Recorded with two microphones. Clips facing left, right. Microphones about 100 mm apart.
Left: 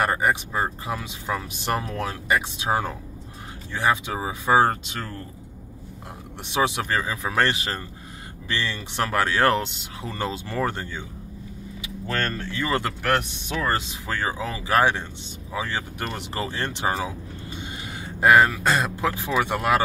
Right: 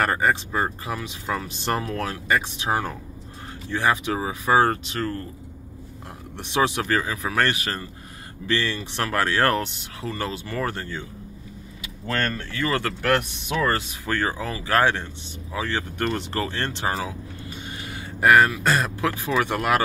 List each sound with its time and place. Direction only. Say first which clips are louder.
0.0 s speech: right 1 dB; 10° left (ahead or behind)
6.3 s speech: right 1 dB; 15° left (ahead or behind)
12.5 s speech: even; 20° left (ahead or behind)
17.6 s a sound: left 1 dB; 20° left (ahead or behind)
18.7 s speech: even; 20° left (ahead or behind)